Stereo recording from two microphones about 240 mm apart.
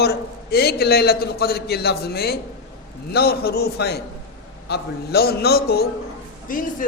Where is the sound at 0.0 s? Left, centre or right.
Left.